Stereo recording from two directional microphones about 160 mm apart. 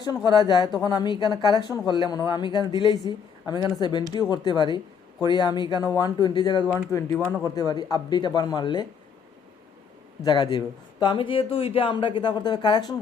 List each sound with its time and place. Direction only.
0.3 s speech: 25° left (ahead or behind)
10.2 s speech: 30° left (ahead or behind)